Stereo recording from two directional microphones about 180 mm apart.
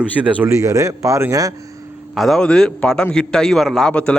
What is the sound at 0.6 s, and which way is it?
Speech, 20° right (ahead or behind).